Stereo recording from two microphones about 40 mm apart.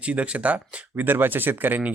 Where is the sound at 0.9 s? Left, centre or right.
Right.